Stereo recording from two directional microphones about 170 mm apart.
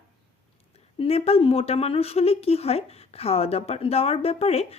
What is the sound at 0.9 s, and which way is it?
Speech, 35° left (ahead or behind).